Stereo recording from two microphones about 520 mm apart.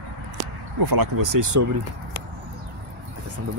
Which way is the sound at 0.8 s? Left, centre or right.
Right.